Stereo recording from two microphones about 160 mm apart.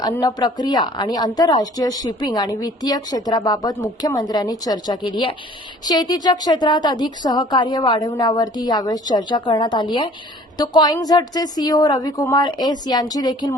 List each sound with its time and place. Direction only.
0.2 s speech: 25° left (ahead or behind)